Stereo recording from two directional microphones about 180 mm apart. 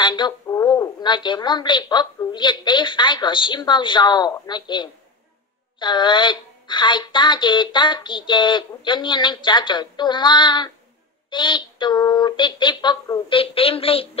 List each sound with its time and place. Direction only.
0.0 s a woman's voice: 25° left (ahead or behind)